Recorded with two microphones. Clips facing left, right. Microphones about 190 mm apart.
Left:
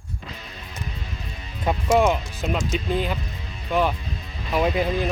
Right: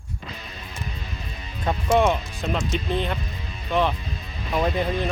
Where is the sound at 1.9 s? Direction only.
5° left (ahead or behind).